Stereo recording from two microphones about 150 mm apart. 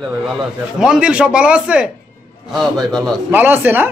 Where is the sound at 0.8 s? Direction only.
5° right (ahead or behind).